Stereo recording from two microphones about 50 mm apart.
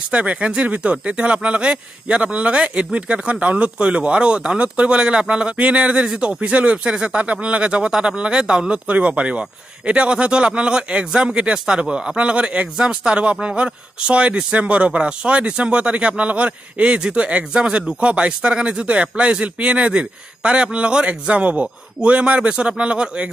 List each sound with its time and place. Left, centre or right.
0.1 s speech: right